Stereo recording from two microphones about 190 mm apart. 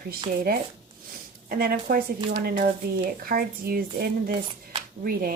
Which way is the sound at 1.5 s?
55° right (ahead or behind).